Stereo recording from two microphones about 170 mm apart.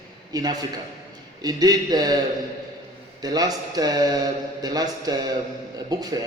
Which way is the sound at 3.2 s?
20° right (ahead or behind).